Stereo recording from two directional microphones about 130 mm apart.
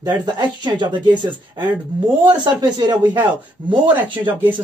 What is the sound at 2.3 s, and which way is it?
Speech, 35° right (ahead or behind).